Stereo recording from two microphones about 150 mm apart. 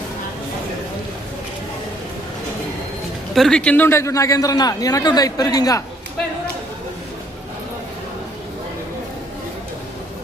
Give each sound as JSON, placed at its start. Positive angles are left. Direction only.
{"t": 3.3, "sound": "a man's voice", "side_deg": 5}